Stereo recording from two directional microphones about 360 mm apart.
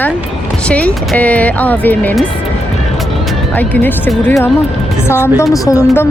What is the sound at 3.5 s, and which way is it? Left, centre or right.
A woman's voice, centre.